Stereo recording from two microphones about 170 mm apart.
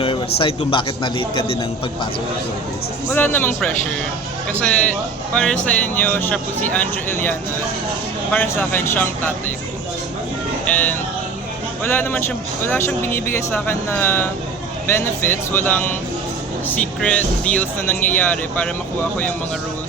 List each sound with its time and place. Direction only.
0.4 s a man's voice: 30° left (ahead or behind)
3.1 s speech: 10° left (ahead or behind)
10.7 s speech: 10° left (ahead or behind)